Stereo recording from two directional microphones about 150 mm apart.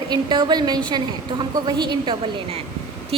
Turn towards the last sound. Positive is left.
turn(degrees=-40)  # may be behind; listen again after turning